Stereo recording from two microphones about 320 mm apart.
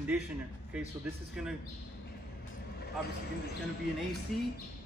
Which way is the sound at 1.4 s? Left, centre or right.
Centre.